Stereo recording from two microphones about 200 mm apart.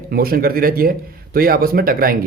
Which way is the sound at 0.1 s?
50° right (ahead or behind).